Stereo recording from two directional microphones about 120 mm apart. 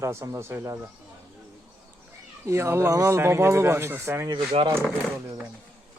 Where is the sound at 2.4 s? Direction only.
25° right (ahead or behind).